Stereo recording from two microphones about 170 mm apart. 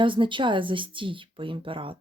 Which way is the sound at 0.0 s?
30° right (ahead or behind).